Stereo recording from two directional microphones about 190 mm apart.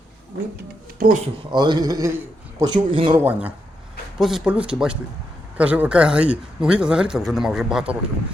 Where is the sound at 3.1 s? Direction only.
10° right (ahead or behind).